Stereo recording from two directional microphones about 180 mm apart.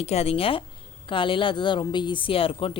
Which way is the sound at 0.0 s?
35° left (ahead or behind).